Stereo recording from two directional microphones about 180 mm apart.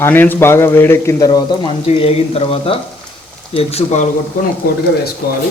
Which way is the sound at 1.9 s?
35° left (ahead or behind).